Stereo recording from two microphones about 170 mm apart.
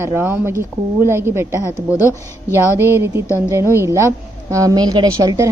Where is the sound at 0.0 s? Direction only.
15° right (ahead or behind).